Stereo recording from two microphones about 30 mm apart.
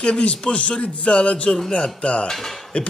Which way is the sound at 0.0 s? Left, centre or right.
Left.